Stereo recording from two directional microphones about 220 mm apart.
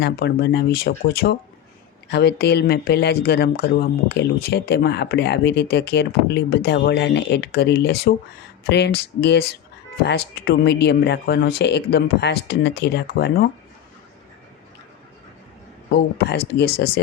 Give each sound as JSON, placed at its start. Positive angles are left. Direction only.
{"t": 0.0, "sound": "speech", "side_deg": 45}
{"t": 16.1, "sound": "speech", "side_deg": 50}